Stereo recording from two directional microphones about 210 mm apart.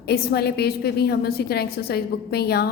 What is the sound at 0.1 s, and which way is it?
A woman's voice, 50° left (ahead or behind).